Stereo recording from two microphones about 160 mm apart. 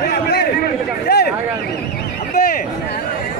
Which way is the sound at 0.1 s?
80° left.